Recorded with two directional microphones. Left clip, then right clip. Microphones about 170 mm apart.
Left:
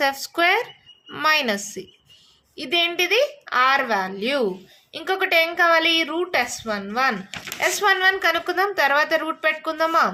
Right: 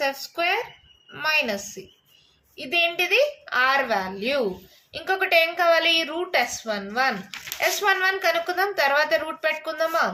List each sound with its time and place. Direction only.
0.0 s a woman's voice: 50° left (ahead or behind)